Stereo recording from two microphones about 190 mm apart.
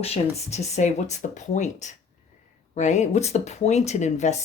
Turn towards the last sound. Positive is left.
turn(degrees=40)  # may be behind; listen again after turning